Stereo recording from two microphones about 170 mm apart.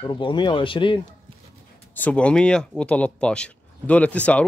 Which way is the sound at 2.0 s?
10° left (ahead or behind).